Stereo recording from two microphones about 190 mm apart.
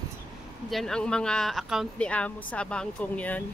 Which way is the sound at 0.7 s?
Centre (ahead or behind).